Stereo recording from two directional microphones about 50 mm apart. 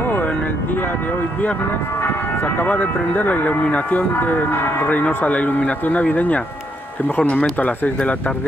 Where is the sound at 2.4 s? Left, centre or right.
Left.